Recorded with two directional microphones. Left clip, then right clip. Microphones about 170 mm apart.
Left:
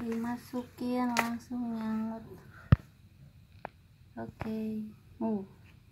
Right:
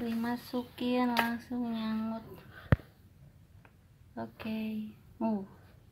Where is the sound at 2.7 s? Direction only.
5° left (ahead or behind).